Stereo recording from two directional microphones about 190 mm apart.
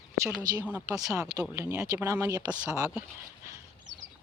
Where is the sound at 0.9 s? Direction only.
20° right (ahead or behind).